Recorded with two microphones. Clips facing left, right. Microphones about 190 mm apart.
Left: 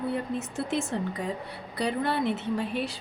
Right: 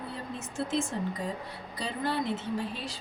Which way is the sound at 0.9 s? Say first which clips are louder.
Left 3 dB; 65° left (ahead or behind).